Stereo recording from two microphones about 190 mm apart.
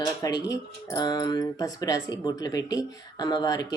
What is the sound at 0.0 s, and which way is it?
Speech, 20° left (ahead or behind).